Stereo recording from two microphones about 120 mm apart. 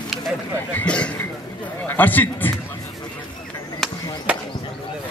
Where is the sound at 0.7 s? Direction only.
10° left (ahead or behind).